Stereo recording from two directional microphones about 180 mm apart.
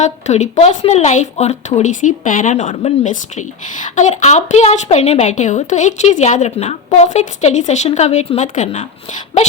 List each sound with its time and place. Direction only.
0.0 s speech: 40° left (ahead or behind)